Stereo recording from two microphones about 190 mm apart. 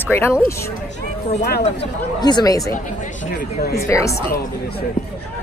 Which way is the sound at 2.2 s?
20° left (ahead or behind).